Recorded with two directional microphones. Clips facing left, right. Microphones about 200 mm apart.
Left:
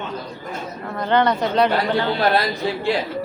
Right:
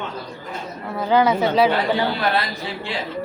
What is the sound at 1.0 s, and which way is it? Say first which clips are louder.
A woman's voice: right 1 dB; 5° right (ahead or behind).